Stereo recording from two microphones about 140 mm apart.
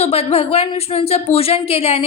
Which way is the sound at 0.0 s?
45° left (ahead or behind).